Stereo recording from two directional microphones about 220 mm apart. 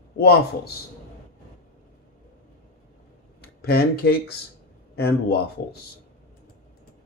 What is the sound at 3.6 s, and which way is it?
Speech, 45° left (ahead or behind).